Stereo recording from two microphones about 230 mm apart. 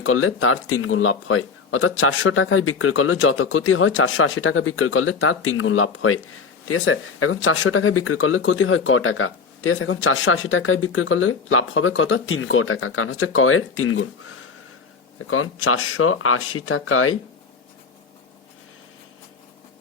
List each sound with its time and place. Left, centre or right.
0.0 s speech: left
15.3 s speech: left